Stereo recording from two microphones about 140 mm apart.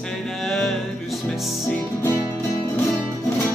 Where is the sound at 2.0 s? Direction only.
20° left (ahead or behind).